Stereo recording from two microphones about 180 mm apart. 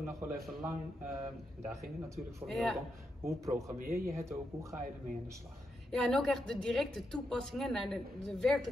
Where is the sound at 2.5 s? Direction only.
Centre (ahead or behind).